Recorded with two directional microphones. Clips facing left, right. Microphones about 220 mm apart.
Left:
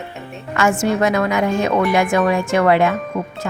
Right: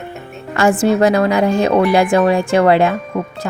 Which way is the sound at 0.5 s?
35° right (ahead or behind).